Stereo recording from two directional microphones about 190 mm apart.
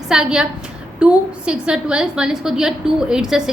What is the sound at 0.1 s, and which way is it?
A woman's voice, 5° right (ahead or behind).